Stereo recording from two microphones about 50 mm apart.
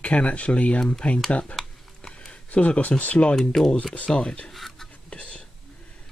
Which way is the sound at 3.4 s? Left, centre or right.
Centre.